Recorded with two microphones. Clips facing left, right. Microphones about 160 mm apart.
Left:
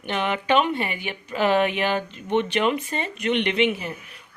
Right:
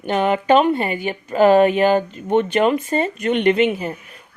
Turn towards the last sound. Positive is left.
turn(degrees=-40)  # may be behind; listen again after turning